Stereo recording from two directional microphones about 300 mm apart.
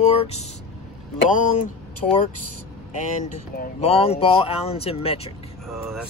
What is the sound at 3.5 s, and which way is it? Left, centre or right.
Speech, centre.